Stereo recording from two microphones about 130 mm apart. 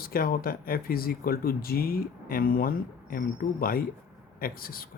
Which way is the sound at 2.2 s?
90° left.